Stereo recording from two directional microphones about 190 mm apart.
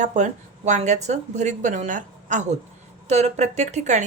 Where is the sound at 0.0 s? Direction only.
40° right (ahead or behind).